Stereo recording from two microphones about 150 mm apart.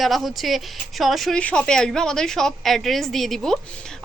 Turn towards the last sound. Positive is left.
turn(degrees=0)  # may be behind; listen again after turning